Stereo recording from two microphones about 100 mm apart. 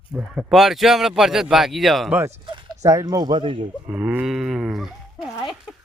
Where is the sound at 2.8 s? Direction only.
35° right (ahead or behind).